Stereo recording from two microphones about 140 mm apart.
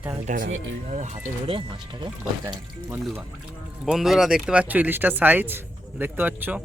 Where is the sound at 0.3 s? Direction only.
60° right (ahead or behind).